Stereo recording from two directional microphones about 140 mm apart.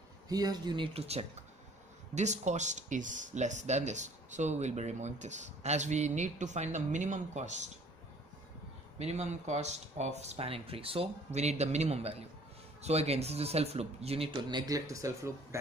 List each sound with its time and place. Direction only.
0.3 s speech: 30° right (ahead or behind)
0.9 s speech: 45° right (ahead or behind)
8.9 s speech: 50° right (ahead or behind); by 15.6 s 20° right (ahead or behind)